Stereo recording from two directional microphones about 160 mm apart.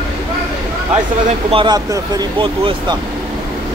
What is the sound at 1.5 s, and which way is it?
Speech, 30° right (ahead or behind).